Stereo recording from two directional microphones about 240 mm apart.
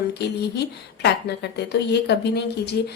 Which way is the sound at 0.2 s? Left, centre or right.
Left.